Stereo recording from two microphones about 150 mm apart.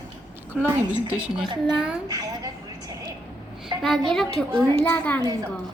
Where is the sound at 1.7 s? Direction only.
5° right (ahead or behind).